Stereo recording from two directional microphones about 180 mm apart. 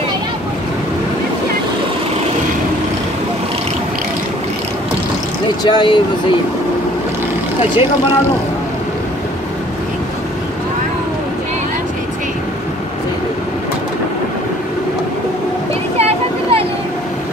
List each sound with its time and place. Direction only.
5.6 s speech: 25° left (ahead or behind)
16.0 s vehicle: 30° right (ahead or behind)